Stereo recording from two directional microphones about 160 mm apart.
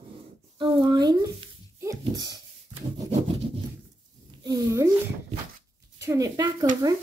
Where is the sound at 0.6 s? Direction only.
30° right (ahead or behind).